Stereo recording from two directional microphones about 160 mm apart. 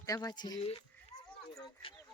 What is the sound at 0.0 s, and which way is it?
Speech, 20° left (ahead or behind).